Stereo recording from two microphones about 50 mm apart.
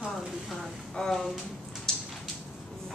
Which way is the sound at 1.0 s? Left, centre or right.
Centre.